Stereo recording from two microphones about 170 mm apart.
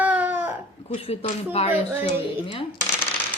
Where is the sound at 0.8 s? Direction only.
35° left (ahead or behind).